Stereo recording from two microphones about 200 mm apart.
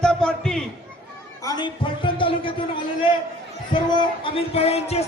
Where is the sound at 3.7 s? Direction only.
25° left (ahead or behind).